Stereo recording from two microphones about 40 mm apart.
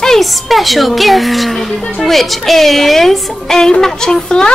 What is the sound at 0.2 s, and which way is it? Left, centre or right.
Speech, centre.